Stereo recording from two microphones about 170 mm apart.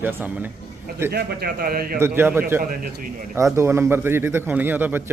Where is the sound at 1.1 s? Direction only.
65° right (ahead or behind).